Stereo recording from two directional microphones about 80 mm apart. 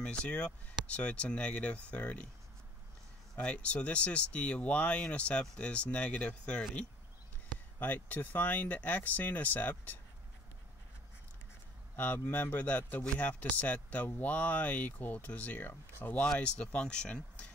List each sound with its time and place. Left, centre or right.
0.0 s speech: centre
3.3 s speech: centre
7.8 s speech: left
12.0 s speech: left